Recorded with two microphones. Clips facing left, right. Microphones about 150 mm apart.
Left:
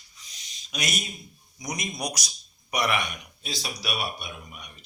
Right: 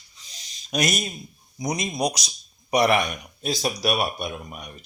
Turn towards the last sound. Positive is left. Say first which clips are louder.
# right 8 dB
turn(degrees=-45)  # may be behind; listen again after turning